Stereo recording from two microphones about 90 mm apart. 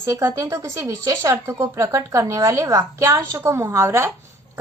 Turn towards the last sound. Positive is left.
turn(degrees=-30)  # may be behind; listen again after turning